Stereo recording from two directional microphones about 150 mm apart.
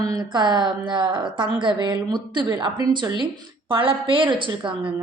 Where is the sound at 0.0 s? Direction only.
30° right (ahead or behind).